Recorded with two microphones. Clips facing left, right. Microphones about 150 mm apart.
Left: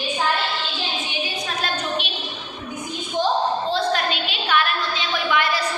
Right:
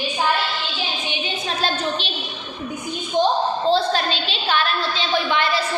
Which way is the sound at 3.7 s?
30° right (ahead or behind).